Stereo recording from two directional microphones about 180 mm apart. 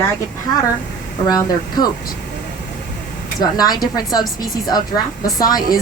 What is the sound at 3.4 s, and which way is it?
A woman's voice, 20° left (ahead or behind).